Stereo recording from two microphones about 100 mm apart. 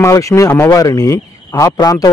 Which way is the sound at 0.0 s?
30° left (ahead or behind).